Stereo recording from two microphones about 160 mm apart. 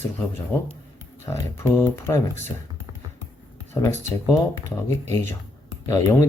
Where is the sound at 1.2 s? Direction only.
20° left (ahead or behind).